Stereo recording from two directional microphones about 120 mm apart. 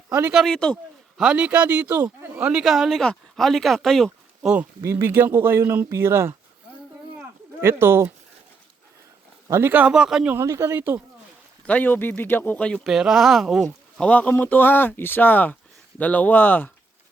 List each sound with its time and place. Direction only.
0.1 s speech: 15° right (ahead or behind)
0.3 s speech: 5° left (ahead or behind)
1.2 s a man's voice: 10° right (ahead or behind)
4.8 s speech: 20° right (ahead or behind)
7.6 s speech: 20° right (ahead or behind)
9.5 s a man's voice: 20° right (ahead or behind)
10.3 s speech: 25° right (ahead or behind)
11.6 s speech: 15° left (ahead or behind)
12.8 s speech: 5° right (ahead or behind)
13.7 s speech: 10° left (ahead or behind)